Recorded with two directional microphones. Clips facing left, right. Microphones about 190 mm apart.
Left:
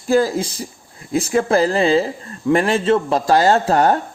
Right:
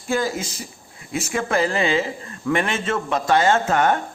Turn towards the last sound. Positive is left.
turn(degrees=35)  # may be behind; listen again after turning